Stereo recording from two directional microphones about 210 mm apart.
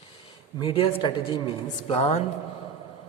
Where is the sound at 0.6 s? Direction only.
25° left (ahead or behind).